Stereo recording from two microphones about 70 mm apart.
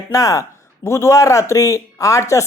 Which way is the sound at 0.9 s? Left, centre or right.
Left.